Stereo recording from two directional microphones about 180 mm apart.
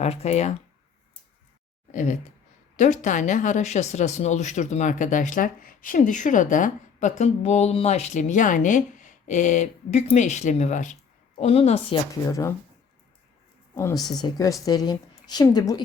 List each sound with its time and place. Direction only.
0.0 s a woman's voice: 35° left (ahead or behind)
1.9 s a woman's voice: 45° left (ahead or behind)
12.3 s speech: 15° left (ahead or behind)
13.7 s a woman's voice: 15° left (ahead or behind)